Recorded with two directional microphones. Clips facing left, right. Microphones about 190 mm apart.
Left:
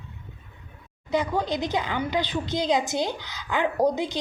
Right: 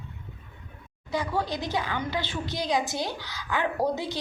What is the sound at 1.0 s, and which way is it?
A woman's voice, 20° left (ahead or behind).